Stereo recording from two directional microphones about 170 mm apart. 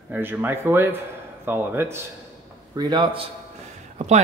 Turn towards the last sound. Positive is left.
turn(degrees=-40)  # may be behind; listen again after turning